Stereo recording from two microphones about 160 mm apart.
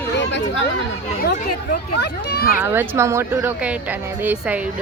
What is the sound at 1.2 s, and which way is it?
Speech, 75° left (ahead or behind).